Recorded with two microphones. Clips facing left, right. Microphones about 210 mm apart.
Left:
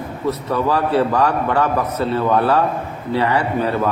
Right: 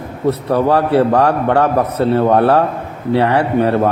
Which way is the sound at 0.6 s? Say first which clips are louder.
Right 4 dB; 65° right (ahead or behind).